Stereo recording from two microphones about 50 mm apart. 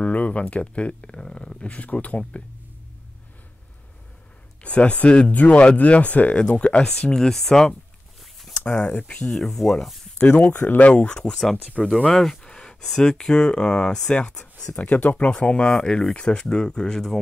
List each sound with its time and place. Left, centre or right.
0.0 s speech: left
1.7 s speech: left
4.6 s speech: left
6.3 s speech: left
8.6 s speech: left
9.3 s speech: centre
10.3 s speech: left
10.9 s speech: left
11.2 s speech: centre
14.8 s speech: left